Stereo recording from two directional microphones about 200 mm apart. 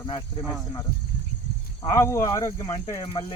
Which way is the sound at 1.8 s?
15° left (ahead or behind).